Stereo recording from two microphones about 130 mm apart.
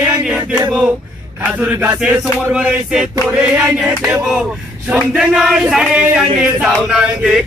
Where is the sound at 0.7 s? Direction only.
5° right (ahead or behind).